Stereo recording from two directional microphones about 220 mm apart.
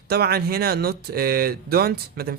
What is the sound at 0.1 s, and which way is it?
Speech, 45° right (ahead or behind).